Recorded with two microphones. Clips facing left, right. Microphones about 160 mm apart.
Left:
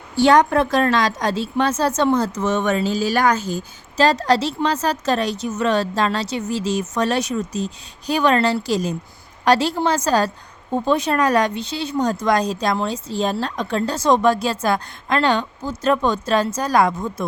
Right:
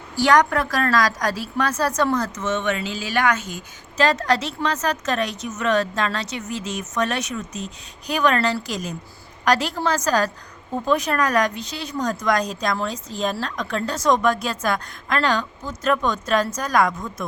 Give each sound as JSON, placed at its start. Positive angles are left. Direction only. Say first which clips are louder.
{"t": 0.2, "sound": "a woman's voice", "louder": "left 3 dB", "side_deg": 25}